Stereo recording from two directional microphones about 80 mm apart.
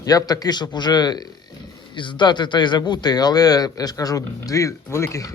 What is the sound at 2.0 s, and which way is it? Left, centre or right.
A man's voice, left.